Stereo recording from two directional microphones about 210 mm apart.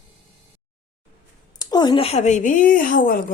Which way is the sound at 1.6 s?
20° left (ahead or behind).